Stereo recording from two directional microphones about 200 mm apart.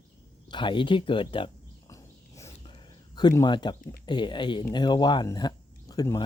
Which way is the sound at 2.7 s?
20° left (ahead or behind).